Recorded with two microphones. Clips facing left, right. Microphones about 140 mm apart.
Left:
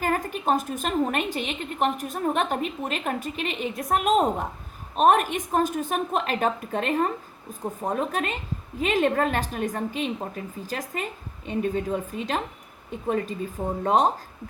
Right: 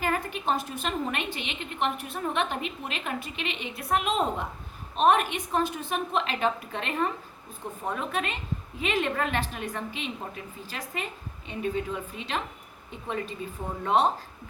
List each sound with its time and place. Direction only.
0.0 s a woman's voice: 40° left (ahead or behind)